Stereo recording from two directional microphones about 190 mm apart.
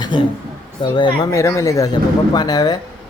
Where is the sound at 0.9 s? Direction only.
25° left (ahead or behind).